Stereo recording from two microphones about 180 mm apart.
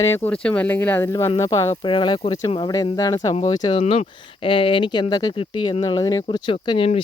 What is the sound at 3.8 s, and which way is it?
Speech, 35° left (ahead or behind).